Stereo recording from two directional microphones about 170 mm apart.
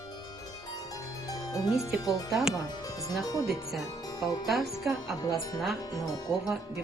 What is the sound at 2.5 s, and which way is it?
Speech, 20° left (ahead or behind).